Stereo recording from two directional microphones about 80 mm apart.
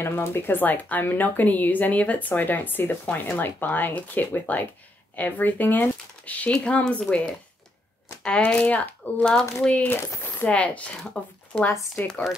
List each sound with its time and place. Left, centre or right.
0.0 s speech: left; by 7.2 s centre
8.5 s speech: centre